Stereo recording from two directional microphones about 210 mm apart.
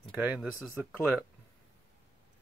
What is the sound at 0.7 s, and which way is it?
Speech, 10° right (ahead or behind).